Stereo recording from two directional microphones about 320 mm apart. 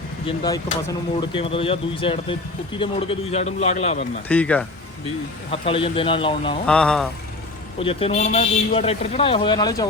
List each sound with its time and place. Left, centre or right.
0.3 s a man's voice: centre
4.3 s speech: centre
5.5 s speech: centre
6.7 s speech: centre
7.8 s speech: centre